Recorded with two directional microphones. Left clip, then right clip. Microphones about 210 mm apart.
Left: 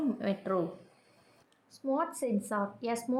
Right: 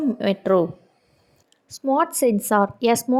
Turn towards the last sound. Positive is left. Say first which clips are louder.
# right 14 dB
turn(degrees=-35)  # may be behind; listen again after turning